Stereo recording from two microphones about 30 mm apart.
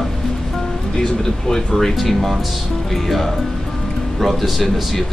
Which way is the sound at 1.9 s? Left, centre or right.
Centre.